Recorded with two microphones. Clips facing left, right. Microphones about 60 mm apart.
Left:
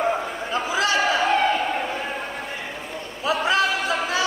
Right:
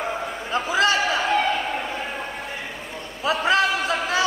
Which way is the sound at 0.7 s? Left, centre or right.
Right.